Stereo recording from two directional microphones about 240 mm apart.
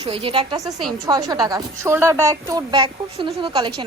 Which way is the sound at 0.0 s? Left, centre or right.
Right.